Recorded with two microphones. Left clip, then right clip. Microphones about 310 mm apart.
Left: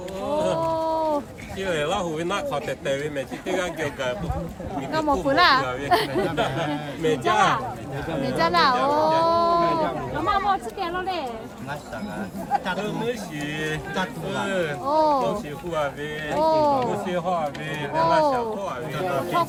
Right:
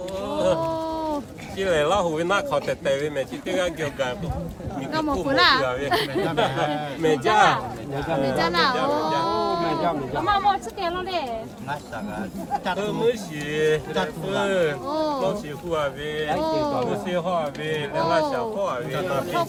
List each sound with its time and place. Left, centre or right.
0.3 s a sound: centre
0.6 s a sound: centre
1.5 s speech: centre
4.9 s speech: centre
6.2 s speech: centre
8.4 s speech: centre
12.6 s speech: centre
14.8 s speech: centre
15.7 s speech: centre
16.4 s speech: centre
17.1 s speech: centre